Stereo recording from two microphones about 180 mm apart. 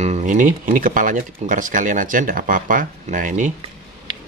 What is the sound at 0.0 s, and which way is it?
Speech, 40° right (ahead or behind).